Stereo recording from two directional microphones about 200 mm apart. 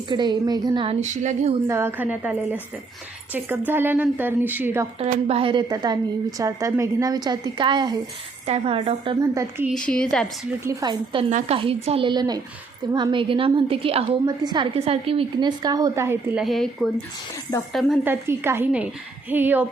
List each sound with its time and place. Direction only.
0.1 s a woman's voice: 20° right (ahead or behind)
1.0 s a woman's voice: 35° right (ahead or behind)
1.6 s speech: 15° right (ahead or behind)
3.7 s speech: 10° right (ahead or behind)
4.9 s a woman's voice: 30° right (ahead or behind)
9.2 s speech: 15° right (ahead or behind)
9.6 s a woman's voice: 5° left (ahead or behind)
10.6 s a woman's voice: 15° right (ahead or behind)
11.3 s a woman's voice: 35° right (ahead or behind); by 18.0 s centre (ahead or behind)
18.0 s speech: 10° right (ahead or behind)